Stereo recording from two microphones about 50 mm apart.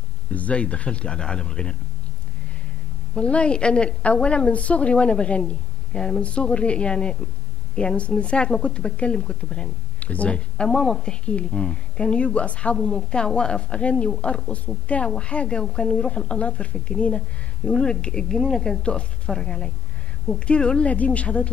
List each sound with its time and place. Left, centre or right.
0.3 s a woman's voice: left
3.2 s a woman's voice: left
9.9 s a woman's voice: left